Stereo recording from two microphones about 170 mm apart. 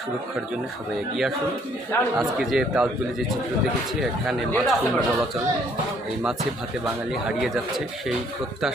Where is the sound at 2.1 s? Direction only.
Centre (ahead or behind).